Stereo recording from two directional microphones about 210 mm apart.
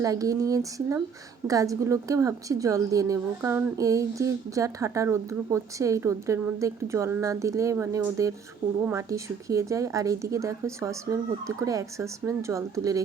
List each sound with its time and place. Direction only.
0.0 s a woman's voice: 15° right (ahead or behind)